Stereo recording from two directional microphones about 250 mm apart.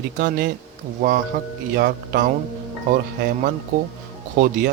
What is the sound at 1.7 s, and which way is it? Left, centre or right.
Speech, right.